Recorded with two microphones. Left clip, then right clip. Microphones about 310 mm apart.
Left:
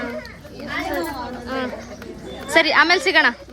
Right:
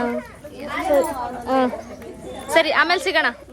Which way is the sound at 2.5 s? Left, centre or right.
Centre.